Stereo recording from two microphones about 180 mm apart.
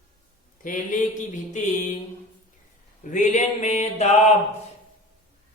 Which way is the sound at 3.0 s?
45° left (ahead or behind).